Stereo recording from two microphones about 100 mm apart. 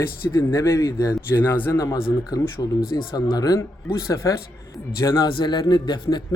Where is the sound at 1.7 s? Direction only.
35° left (ahead or behind).